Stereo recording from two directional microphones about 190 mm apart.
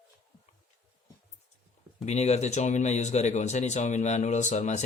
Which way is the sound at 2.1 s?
35° left (ahead or behind).